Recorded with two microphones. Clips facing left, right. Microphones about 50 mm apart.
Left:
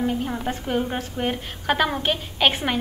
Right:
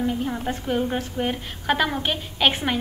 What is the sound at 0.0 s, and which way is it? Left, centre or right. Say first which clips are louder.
A woman's voice: even; centre.